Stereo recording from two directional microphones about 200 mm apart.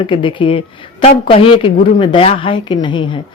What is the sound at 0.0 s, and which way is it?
Speech, 25° left (ahead or behind).